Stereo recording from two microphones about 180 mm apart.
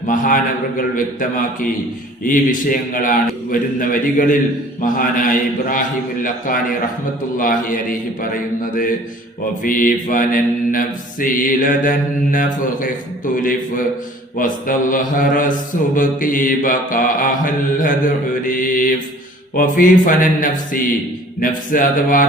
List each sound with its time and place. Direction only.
0.0 s a man's voice: 45° left (ahead or behind)
0.8 s mantra: 50° left (ahead or behind)
9.6 s mantra: 50° left (ahead or behind)